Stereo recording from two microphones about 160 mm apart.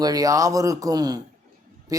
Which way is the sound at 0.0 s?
25° right (ahead or behind).